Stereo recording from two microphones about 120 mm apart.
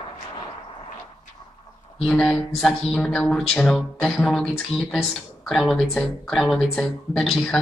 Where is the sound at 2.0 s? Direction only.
Centre (ahead or behind).